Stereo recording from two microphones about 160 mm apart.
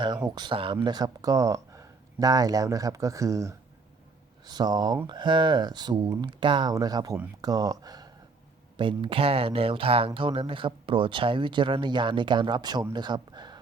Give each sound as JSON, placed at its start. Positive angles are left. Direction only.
{"t": 0.3, "sound": "speech", "side_deg": -30}